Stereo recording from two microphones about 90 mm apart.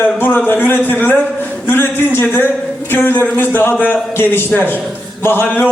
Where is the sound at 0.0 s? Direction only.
20° left (ahead or behind).